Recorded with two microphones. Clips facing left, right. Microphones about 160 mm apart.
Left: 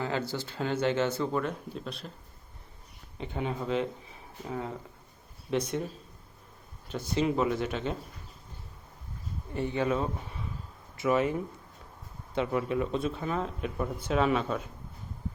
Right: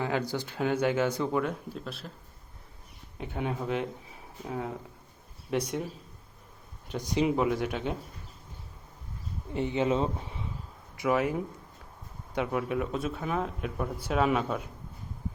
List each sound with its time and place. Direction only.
0.0 s speech: 15° right (ahead or behind)
3.2 s speech: 10° right (ahead or behind)
6.8 s speech: 15° right (ahead or behind)
9.5 s speech: 20° right (ahead or behind)
10.9 s speech: 15° right (ahead or behind)